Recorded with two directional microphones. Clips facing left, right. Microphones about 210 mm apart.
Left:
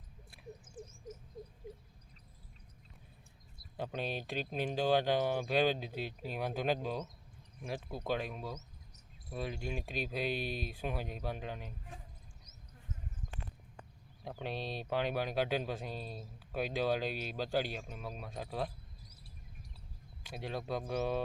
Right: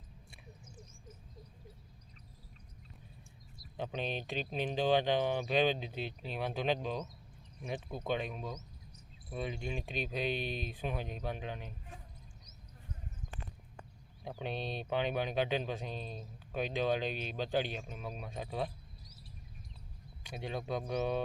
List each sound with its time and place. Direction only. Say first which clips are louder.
0.8 s frog: left 11 dB; 50° left (ahead or behind)
3.8 s speech: even; 5° left (ahead or behind)
13.2 s horse: even; 50° left (ahead or behind)
14.3 s speech: right 1 dB; centre (ahead or behind)
20.2 s speech: right 1 dB; centre (ahead or behind)